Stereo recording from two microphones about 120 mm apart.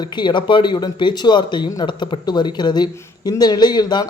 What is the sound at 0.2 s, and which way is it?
Speech, 40° left (ahead or behind).